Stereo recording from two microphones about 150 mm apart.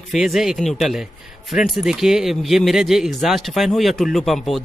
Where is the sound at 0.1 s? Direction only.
Centre (ahead or behind).